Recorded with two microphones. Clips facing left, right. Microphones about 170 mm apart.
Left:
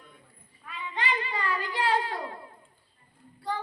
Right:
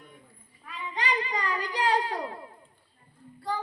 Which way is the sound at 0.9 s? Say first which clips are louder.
Right 1 dB; 40° right (ahead or behind).